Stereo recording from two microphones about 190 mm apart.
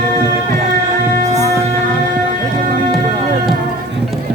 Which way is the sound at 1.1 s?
35° right (ahead or behind).